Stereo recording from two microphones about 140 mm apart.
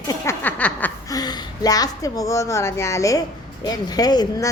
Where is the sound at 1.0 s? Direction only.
30° left (ahead or behind).